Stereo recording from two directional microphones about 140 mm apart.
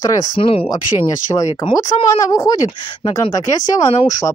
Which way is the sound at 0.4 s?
40° left (ahead or behind).